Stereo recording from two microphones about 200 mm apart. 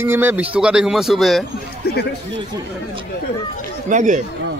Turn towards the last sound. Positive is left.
turn(degrees=-40)  # may be behind; listen again after turning